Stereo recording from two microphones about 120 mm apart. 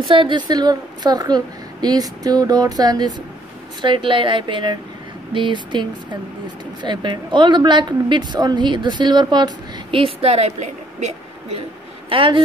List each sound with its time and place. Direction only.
0.0 s a woman's voice: 45° right (ahead or behind)
3.8 s a woman's voice: 45° right (ahead or behind); by 11.6 s 70° right (ahead or behind)
12.1 s a woman's voice: 45° right (ahead or behind)